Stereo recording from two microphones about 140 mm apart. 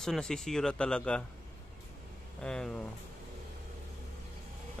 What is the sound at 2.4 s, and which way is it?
Speech, 5° left (ahead or behind).